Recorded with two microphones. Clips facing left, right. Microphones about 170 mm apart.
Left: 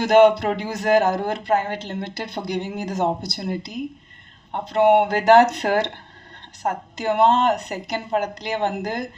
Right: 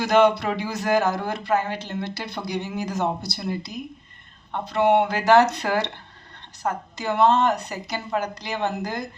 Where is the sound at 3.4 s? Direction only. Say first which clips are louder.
Left 3 dB; 50° left (ahead or behind).